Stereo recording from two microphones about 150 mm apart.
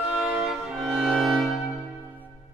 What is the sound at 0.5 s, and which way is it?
Music, 15° right (ahead or behind).